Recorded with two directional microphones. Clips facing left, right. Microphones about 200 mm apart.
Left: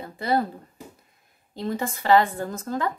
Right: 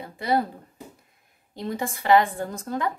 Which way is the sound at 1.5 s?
15° right (ahead or behind).